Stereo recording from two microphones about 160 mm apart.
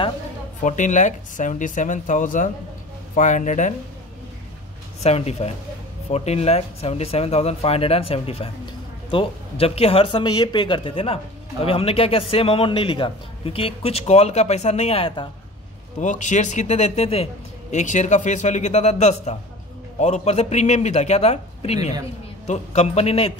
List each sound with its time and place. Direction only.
0.6 s speech: 50° left (ahead or behind)
5.0 s a man's voice: 40° left (ahead or behind)
16.0 s a man's voice: 50° left (ahead or behind)